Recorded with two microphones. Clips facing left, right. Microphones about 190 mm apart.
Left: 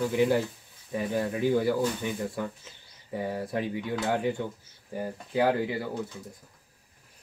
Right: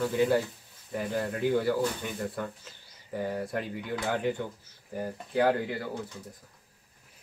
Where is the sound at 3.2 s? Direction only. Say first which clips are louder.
Left 1 dB; 10° left (ahead or behind).